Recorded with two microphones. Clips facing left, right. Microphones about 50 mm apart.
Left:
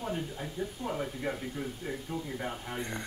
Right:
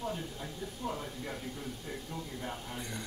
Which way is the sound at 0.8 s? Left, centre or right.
Left.